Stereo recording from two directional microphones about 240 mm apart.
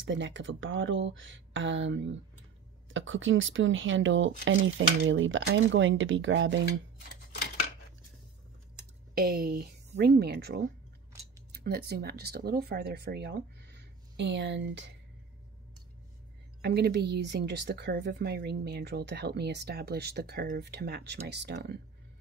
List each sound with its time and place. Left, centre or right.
0.0 s a woman's voice: right
9.1 s speech: right
16.6 s a woman's voice: right